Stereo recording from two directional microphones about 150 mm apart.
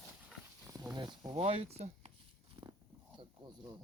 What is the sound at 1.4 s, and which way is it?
Speech, 45° right (ahead or behind).